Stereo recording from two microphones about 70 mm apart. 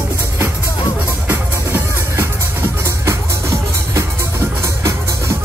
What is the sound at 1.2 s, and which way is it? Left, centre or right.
Music, right.